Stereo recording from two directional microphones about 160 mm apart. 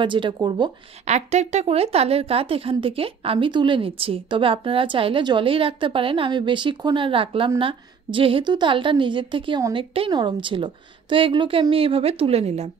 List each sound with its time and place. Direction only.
0.0 s a woman's voice: 30° right (ahead or behind)
1.0 s a woman's voice: 45° right (ahead or behind)